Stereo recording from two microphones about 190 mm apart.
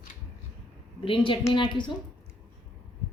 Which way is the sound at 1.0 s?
25° left (ahead or behind).